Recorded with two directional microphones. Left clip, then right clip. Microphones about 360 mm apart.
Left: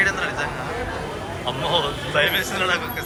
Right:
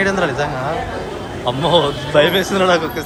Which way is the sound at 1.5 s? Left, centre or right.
Centre.